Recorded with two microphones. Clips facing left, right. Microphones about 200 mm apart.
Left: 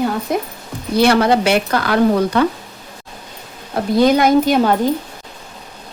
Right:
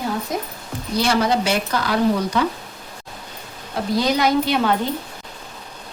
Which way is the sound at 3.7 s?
55° left (ahead or behind).